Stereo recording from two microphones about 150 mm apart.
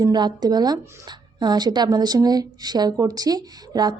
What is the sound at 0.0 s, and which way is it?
A woman's voice, 25° right (ahead or behind).